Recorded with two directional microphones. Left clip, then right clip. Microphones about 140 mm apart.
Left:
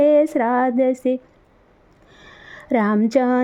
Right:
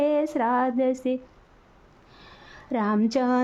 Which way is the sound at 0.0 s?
35° left (ahead or behind).